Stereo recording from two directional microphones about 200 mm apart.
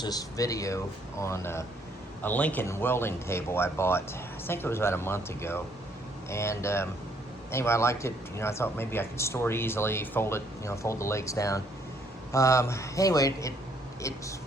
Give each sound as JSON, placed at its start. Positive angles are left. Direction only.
{"t": 0.0, "sound": "speech", "side_deg": 20}